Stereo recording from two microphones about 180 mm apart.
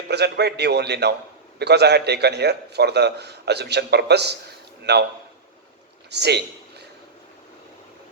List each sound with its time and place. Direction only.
0.1 s a man's voice: 65° right (ahead or behind)
6.1 s a man's voice: 65° right (ahead or behind)